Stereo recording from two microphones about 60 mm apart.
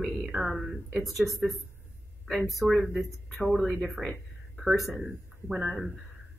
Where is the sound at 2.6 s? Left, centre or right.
Right.